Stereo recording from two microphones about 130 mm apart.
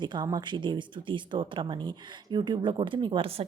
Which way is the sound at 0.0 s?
35° right (ahead or behind).